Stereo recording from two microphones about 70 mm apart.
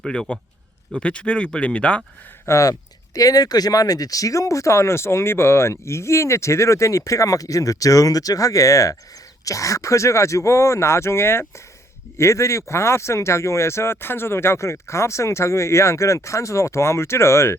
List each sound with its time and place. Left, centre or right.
0.0 s speech: centre
2.5 s speech: left
3.2 s speech: left